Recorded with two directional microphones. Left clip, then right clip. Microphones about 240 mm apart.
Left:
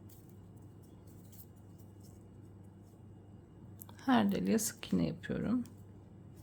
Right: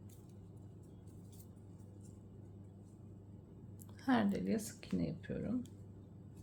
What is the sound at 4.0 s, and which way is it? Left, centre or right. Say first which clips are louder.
Speech: left 4 dB; centre.